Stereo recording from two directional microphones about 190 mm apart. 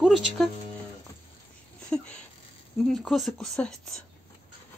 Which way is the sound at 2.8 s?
Centre (ahead or behind).